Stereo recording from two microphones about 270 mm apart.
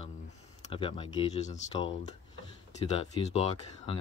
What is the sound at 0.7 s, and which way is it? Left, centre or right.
Speech, centre.